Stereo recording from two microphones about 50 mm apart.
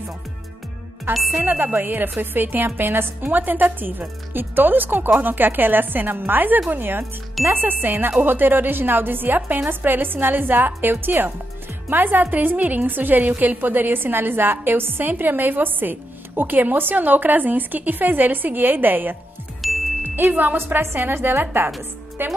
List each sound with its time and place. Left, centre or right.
1.1 s a woman's voice: right
19.6 s music: centre
20.2 s a woman's voice: right
20.5 s a woman's voice: right